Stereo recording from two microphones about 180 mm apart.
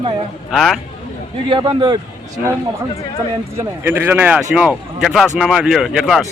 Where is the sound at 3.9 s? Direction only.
10° right (ahead or behind).